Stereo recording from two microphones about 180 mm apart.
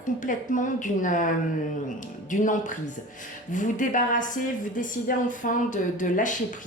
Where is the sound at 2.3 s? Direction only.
45° left (ahead or behind).